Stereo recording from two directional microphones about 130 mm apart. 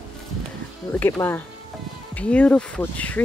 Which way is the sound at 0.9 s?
15° left (ahead or behind).